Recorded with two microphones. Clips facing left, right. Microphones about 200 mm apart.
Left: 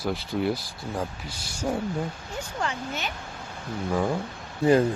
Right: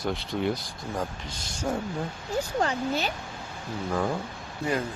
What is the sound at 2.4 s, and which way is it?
Speech, 40° right (ahead or behind).